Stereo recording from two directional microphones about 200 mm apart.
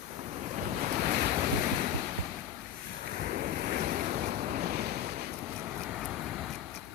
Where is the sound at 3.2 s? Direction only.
45° right (ahead or behind).